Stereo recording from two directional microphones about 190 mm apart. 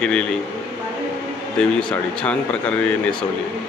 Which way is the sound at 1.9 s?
5° left (ahead or behind).